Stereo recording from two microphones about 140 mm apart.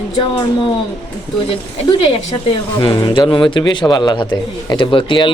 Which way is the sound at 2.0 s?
40° left (ahead or behind).